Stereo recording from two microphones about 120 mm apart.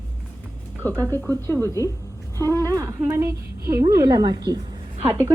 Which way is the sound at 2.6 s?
25° right (ahead or behind).